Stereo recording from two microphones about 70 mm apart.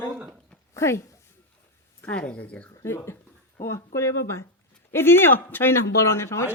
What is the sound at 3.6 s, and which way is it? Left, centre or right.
Speech, left.